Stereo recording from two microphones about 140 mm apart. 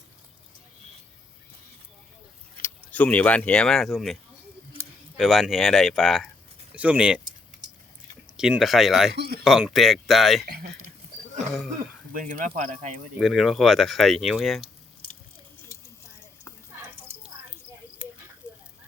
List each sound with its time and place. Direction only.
2.6 s speech: 15° left (ahead or behind); by 7.2 s 5° right (ahead or behind)
8.4 s speech: 5° right (ahead or behind)
10.5 s speech: 90° right
12.1 s speech: 70° right (ahead or behind)
13.1 s speech: centre (ahead or behind)
18.4 s a sound: 20° left (ahead or behind)